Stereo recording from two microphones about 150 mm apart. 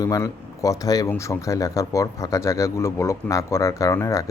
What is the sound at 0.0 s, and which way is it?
Speech, 20° left (ahead or behind).